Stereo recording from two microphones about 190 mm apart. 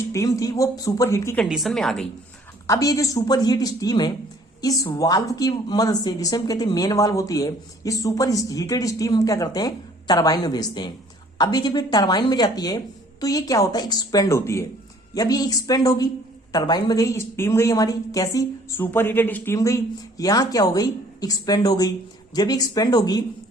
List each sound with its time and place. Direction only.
0.1 s a woman's voice: 15° left (ahead or behind)
1.4 s a woman's voice: centre (ahead or behind)
2.6 s a woman's voice: 20° left (ahead or behind)